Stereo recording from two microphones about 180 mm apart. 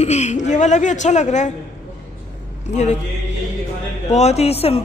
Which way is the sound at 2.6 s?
40° left (ahead or behind).